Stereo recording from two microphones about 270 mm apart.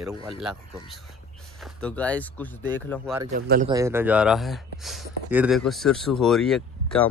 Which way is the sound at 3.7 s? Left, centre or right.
Centre.